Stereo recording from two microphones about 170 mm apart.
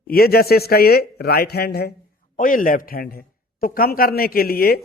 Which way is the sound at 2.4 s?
50° left (ahead or behind).